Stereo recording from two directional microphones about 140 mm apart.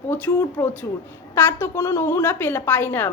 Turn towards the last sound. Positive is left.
turn(degrees=15)  # may be behind; listen again after turning